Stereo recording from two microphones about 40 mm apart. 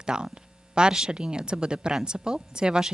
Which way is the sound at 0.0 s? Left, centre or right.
Right.